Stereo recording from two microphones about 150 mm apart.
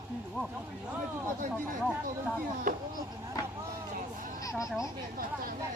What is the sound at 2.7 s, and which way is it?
Speech, 70° right (ahead or behind).